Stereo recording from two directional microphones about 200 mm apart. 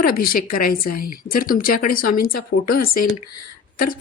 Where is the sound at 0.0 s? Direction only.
45° left (ahead or behind).